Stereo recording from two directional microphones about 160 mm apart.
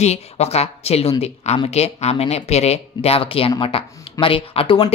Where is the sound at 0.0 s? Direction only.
40° left (ahead or behind).